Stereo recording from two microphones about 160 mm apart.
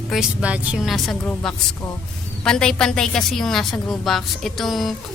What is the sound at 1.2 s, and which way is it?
A woman's voice, 10° left (ahead or behind).